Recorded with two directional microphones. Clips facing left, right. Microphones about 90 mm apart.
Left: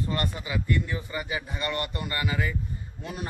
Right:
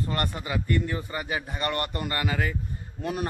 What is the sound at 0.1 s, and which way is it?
A man's voice, 55° right (ahead or behind).